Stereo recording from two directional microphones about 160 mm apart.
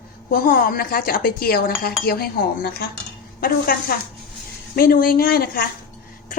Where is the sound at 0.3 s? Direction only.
60° left (ahead or behind).